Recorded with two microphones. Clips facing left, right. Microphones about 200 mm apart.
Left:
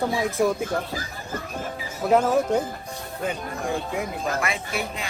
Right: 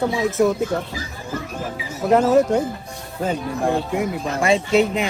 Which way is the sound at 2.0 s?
Centre (ahead or behind).